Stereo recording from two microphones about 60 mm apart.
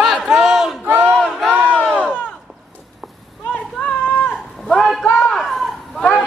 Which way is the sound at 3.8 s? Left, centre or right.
Left.